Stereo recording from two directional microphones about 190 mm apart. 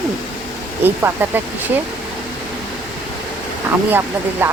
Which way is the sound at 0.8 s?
10° right (ahead or behind).